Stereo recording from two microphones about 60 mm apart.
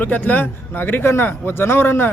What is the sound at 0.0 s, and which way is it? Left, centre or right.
Speech, left.